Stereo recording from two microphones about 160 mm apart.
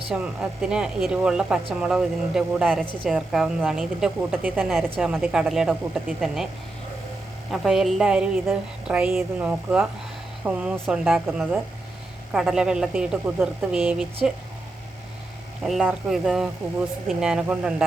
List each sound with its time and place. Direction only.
0.1 s speech: 5° right (ahead or behind)
7.5 s speech: centre (ahead or behind)
15.6 s speech: 5° right (ahead or behind)